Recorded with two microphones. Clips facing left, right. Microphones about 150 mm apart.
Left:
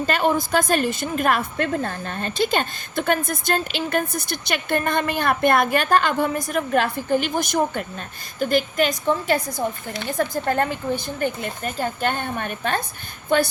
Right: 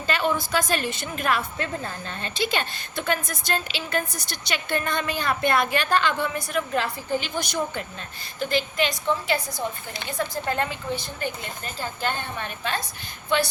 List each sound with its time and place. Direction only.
0.0 s a woman's voice: 50° left (ahead or behind)